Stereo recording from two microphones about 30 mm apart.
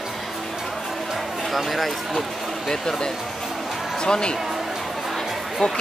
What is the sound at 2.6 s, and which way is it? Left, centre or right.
Speech, left.